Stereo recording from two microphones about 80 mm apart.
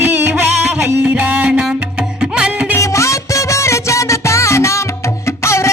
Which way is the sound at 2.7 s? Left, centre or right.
Left.